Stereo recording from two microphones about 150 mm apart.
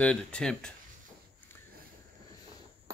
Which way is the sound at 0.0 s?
5° left (ahead or behind).